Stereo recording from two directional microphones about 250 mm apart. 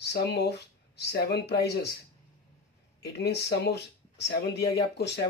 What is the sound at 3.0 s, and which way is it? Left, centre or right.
Speech, left.